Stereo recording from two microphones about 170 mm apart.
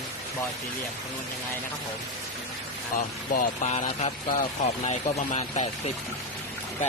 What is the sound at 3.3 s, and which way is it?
Speech, 45° left (ahead or behind).